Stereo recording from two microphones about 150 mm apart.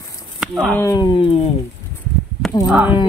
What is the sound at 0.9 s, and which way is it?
Speech, 30° left (ahead or behind).